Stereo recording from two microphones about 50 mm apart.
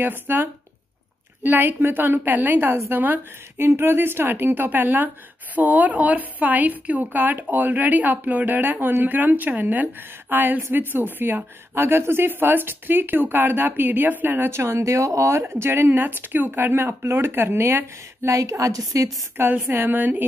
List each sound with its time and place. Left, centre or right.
0.0 s speech: right
2.2 s a woman's voice: right
3.5 s a woman's voice: right
14.5 s speech: right
15.5 s speech: right
16.2 s speech: right
17.0 s a woman's voice: right
17.3 s a woman's voice: right
19.4 s speech: right
19.7 s a woman's voice: right